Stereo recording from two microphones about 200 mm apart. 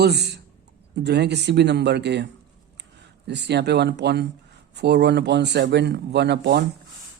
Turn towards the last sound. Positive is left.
turn(degrees=-55)  # may be behind; listen again after turning